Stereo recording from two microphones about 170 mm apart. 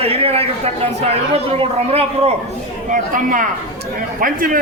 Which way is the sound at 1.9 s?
35° right (ahead or behind).